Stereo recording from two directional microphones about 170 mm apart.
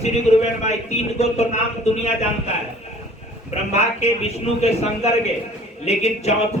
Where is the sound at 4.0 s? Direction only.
40° left (ahead or behind).